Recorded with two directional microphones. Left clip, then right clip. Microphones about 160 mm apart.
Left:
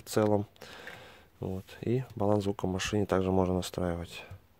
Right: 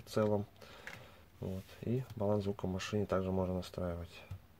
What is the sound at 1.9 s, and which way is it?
Speech, 40° left (ahead or behind).